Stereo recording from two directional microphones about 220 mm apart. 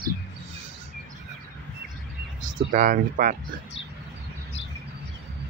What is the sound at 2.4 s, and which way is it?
Speech, 35° right (ahead or behind).